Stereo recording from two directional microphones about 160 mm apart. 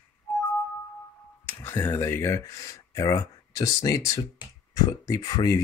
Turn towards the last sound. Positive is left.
turn(degrees=25)  # may be behind; listen again after turning